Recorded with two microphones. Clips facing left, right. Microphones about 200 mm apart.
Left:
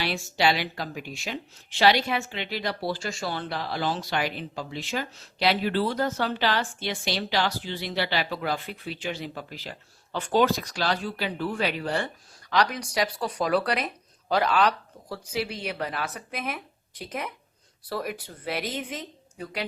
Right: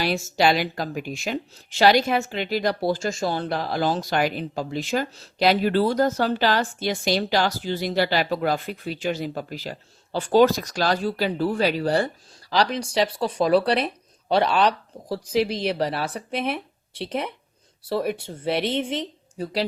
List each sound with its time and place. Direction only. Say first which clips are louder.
0.0 s a woman's voice: right 4 dB; 45° right (ahead or behind)